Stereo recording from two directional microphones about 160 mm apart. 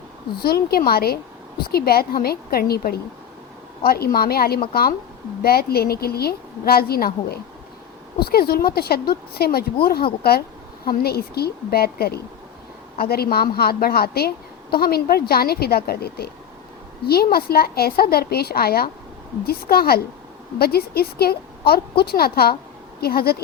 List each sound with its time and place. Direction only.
0.3 s a woman's voice: 75° left (ahead or behind)
10.8 s a woman's voice: 75° left (ahead or behind)